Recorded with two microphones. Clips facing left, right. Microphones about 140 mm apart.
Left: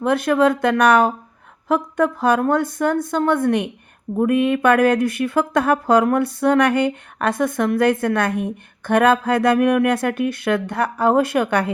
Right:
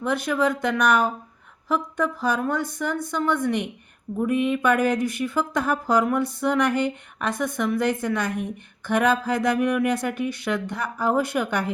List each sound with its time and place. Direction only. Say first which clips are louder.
0.0 s speech: left 7 dB; 60° left (ahead or behind)